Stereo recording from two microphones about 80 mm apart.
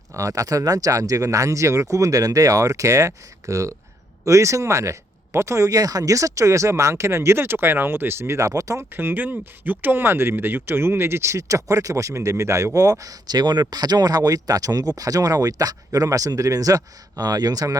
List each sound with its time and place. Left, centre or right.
0.1 s speech: right
8.9 s speech: right